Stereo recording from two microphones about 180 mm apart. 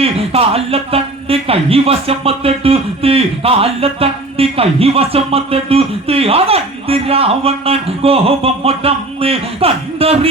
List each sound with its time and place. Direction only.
0.0 s speech: 35° right (ahead or behind)